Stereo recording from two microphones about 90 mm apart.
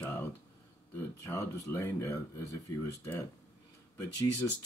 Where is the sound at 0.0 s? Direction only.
25° left (ahead or behind).